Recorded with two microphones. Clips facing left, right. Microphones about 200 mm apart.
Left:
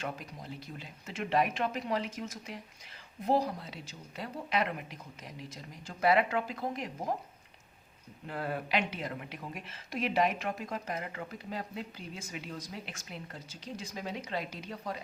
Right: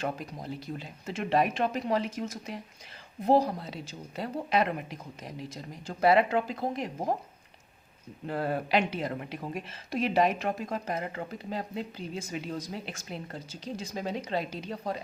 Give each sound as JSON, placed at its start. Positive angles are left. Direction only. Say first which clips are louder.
{"t": 0.8, "sound": "speech", "louder": "right 4 dB", "side_deg": -35}
{"t": 5.9, "sound": "speech", "louder": "right 4 dB", "side_deg": -30}
{"t": 8.3, "sound": "speech", "louder": "right 5 dB", "side_deg": -35}